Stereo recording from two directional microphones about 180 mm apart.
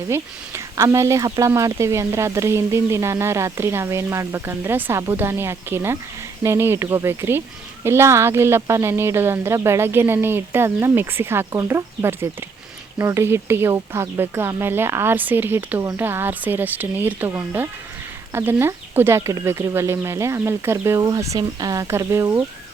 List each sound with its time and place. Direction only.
0.1 s speech: 15° right (ahead or behind)